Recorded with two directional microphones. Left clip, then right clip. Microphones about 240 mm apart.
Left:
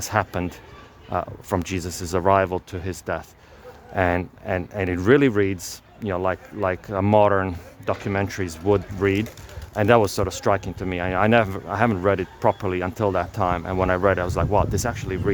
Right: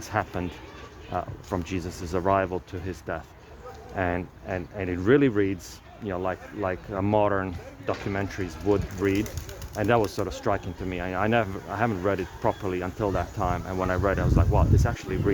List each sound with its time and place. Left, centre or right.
0.1 s speech: left